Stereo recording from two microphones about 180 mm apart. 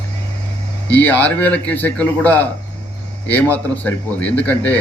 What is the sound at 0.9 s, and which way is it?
Speech, 10° left (ahead or behind).